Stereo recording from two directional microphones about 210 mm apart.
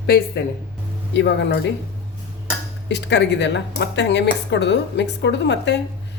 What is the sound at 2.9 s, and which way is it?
Speech, 55° left (ahead or behind).